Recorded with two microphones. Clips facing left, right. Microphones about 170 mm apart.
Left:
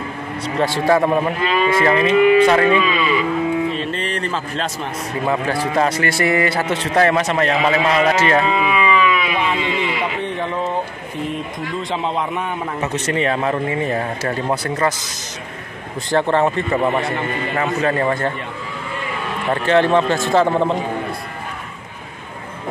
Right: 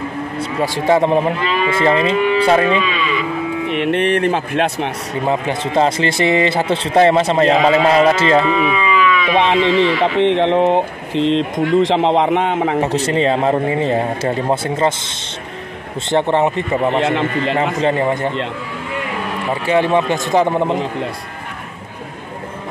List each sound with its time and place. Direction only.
0.6 s a man's voice: 20° right (ahead or behind)
3.6 s speech: 70° right (ahead or behind)
5.2 s a man's voice: 20° right (ahead or behind)
8.5 s a sound: 25° left (ahead or behind)
9.4 s speech: 85° right
12.8 s a man's voice: 30° right (ahead or behind)
17.0 s a man's voice: 80° right
17.8 s a man's voice: 20° right (ahead or behind)
19.5 s a man's voice: 10° right (ahead or behind)